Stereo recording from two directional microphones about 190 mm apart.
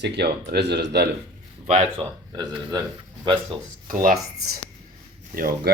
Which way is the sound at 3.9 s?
45° right (ahead or behind).